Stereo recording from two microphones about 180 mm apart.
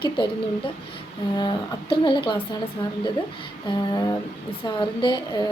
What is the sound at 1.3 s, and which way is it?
Speech, 25° left (ahead or behind).